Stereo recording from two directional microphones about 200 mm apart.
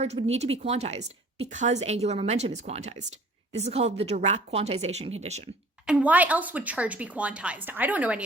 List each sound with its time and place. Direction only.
0.0 s a woman's voice: 30° right (ahead or behind)
5.8 s a woman's voice: 5° right (ahead or behind)